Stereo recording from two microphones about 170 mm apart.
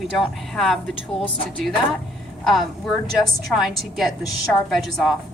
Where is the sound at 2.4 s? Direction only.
Centre (ahead or behind).